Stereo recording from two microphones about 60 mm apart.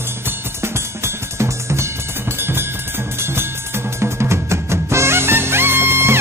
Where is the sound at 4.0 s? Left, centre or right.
Right.